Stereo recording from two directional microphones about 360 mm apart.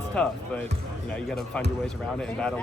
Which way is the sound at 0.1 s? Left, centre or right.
Centre.